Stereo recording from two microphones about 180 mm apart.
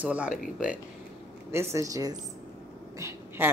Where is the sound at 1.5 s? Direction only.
15° right (ahead or behind).